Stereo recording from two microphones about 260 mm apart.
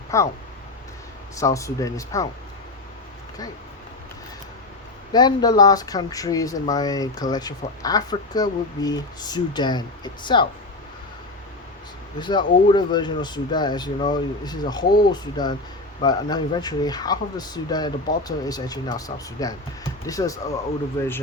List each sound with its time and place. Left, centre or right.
0.1 s speech: centre
1.4 s speech: centre
5.1 s speech: centre
12.2 s speech: centre